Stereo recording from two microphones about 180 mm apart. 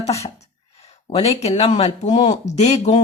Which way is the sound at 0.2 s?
35° left (ahead or behind).